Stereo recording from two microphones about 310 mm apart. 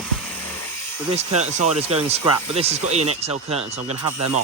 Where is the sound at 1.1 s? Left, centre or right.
Right.